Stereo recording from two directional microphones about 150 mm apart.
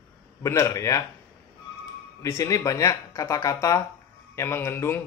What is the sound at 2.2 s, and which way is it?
Speech, 20° left (ahead or behind).